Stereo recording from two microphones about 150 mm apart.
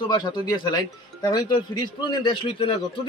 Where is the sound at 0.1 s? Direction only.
30° left (ahead or behind).